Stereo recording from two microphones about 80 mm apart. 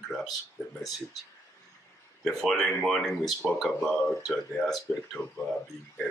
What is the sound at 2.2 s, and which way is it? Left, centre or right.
Speech, centre.